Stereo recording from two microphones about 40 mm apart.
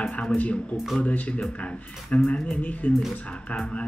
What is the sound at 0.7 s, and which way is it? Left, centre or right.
Speech, centre.